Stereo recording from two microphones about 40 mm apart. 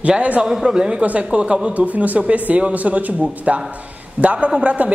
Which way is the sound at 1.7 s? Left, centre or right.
Right.